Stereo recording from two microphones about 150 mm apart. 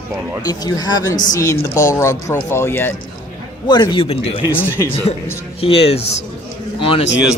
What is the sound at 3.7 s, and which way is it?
Speech, 30° left (ahead or behind).